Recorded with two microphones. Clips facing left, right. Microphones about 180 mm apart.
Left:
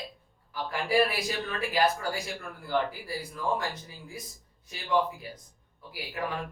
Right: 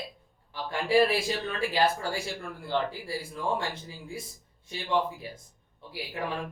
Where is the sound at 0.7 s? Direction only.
25° right (ahead or behind).